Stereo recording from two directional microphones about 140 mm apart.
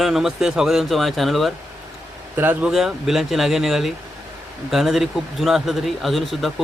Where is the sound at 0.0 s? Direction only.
Centre (ahead or behind).